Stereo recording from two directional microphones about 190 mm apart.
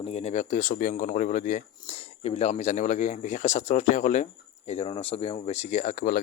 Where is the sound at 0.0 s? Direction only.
30° left (ahead or behind).